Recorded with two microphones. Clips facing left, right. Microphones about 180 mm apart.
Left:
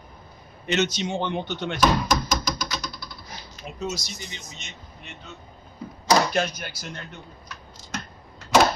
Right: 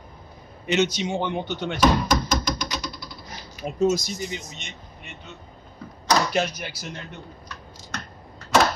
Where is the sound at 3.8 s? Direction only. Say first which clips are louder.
Right 10 dB; 50° right (ahead or behind).